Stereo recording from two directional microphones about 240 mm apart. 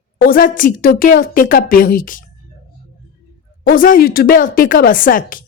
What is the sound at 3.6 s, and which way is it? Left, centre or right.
Speech, left.